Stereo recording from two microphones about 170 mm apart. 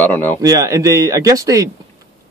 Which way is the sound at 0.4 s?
20° right (ahead or behind).